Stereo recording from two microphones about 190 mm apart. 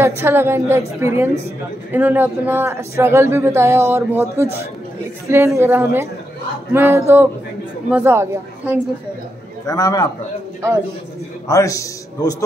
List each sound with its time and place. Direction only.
0.0 s speech: 15° right (ahead or behind)
9.7 s a man's voice: 20° left (ahead or behind)
11.4 s a man's voice: 15° left (ahead or behind)